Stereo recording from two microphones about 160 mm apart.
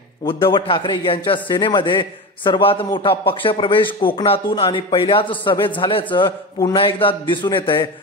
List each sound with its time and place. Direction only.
0.3 s a man's voice: 30° left (ahead or behind)